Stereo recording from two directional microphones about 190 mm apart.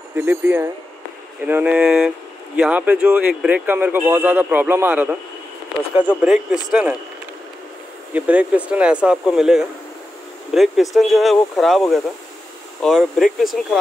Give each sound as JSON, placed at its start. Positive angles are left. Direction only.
{"t": 0.1, "sound": "speech", "side_deg": -10}
{"t": 8.1, "sound": "speech", "side_deg": -5}